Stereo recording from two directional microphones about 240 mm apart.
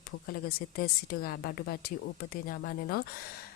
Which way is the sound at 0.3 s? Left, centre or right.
Left.